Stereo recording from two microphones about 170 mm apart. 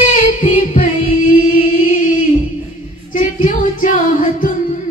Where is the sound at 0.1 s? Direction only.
45° left (ahead or behind).